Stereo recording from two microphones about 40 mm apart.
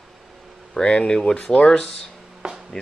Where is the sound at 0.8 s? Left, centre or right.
Left.